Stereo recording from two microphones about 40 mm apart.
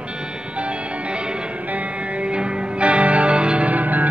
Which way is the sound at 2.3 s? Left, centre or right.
Right.